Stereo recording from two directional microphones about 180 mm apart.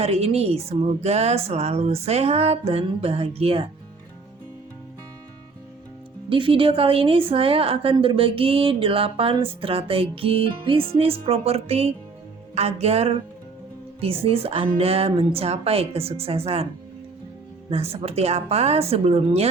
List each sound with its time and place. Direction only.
0.0 s a woman's voice: 35° right (ahead or behind)
6.2 s a woman's voice: 30° right (ahead or behind)
17.7 s a woman's voice: 35° right (ahead or behind)